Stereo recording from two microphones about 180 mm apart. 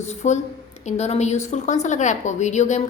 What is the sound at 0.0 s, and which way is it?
A woman's voice, 40° left (ahead or behind).